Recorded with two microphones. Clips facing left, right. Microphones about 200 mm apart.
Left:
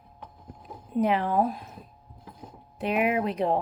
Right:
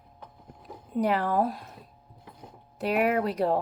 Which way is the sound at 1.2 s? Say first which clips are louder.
Left 1 dB; 40° right (ahead or behind).